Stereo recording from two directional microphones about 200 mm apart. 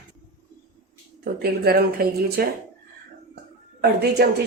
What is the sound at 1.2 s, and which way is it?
Speech, 50° right (ahead or behind).